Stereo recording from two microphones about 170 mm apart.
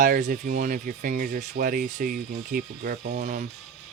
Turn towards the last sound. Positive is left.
turn(degrees=-50)  # may be behind; listen again after turning